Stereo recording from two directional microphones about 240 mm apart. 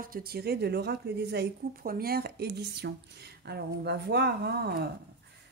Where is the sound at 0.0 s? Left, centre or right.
Right.